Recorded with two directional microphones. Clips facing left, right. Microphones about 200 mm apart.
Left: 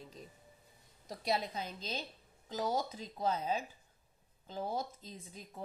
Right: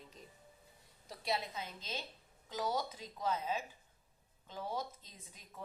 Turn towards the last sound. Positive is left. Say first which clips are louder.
# left 5 dB
turn(degrees=35)  # may be behind; listen again after turning